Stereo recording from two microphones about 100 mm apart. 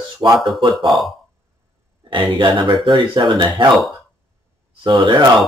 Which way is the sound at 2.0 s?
55° right (ahead or behind).